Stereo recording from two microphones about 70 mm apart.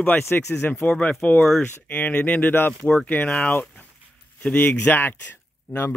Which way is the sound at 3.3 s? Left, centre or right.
Centre.